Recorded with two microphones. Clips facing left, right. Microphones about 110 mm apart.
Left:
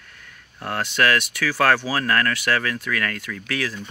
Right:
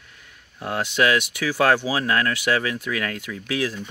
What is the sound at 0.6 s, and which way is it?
Speech, 15° right (ahead or behind).